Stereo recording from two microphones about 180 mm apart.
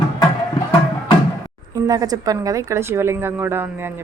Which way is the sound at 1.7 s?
20° right (ahead or behind).